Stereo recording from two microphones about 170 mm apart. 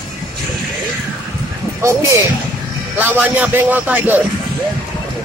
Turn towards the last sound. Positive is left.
turn(degrees=-10)  # may be behind; listen again after turning